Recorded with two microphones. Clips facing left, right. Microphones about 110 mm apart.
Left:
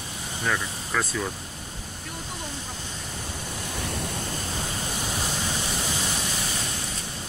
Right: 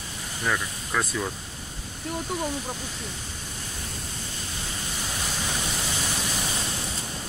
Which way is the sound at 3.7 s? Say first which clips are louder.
Left 7 dB; 65° left (ahead or behind).